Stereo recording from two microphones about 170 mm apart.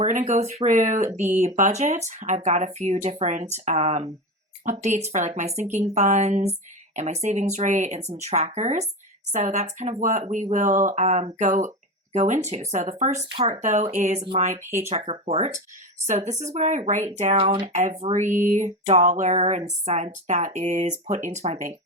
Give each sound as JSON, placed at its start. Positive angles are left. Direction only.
{"t": 0.0, "sound": "speech", "side_deg": -45}
{"t": 17.7, "sound": "speech", "side_deg": -45}